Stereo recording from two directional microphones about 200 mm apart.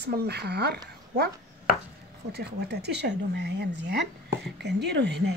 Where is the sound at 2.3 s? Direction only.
55° right (ahead or behind).